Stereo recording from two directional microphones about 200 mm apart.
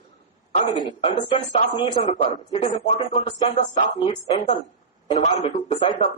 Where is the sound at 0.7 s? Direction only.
20° left (ahead or behind).